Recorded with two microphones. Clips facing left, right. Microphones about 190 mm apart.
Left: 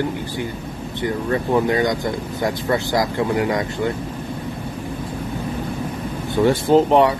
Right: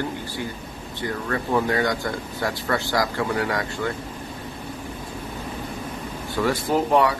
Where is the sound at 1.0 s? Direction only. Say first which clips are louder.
Left 5 dB; 20° left (ahead or behind).